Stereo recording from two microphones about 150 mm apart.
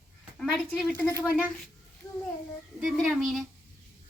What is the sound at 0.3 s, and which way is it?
Speech, 5° left (ahead or behind).